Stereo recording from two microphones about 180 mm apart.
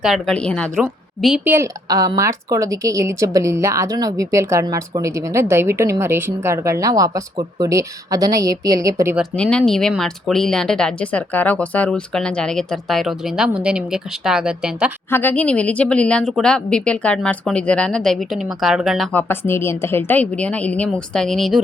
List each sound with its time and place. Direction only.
0.0 s speech: centre (ahead or behind)
1.5 s a woman's voice: 15° right (ahead or behind)
9.3 s speech: 5° left (ahead or behind)
15.1 s a woman's voice: 10° left (ahead or behind)
19.3 s a woman's voice: 15° left (ahead or behind)